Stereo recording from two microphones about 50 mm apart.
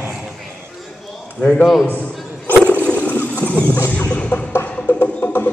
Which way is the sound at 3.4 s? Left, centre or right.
Left.